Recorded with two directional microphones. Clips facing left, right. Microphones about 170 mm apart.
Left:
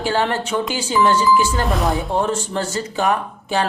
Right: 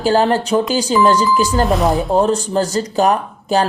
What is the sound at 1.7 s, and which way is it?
Speech, centre (ahead or behind).